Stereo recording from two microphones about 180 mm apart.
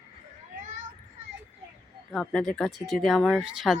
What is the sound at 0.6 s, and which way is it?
Children playing, 45° right (ahead or behind).